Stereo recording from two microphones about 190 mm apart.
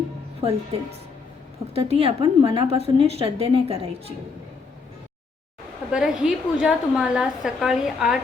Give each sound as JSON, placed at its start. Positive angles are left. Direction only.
{"t": 0.4, "sound": "a woman's voice", "side_deg": -30}
{"t": 5.9, "sound": "a woman's voice", "side_deg": -5}